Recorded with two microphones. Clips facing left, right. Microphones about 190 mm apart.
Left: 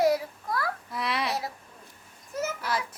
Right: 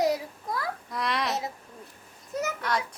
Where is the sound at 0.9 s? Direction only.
5° left (ahead or behind).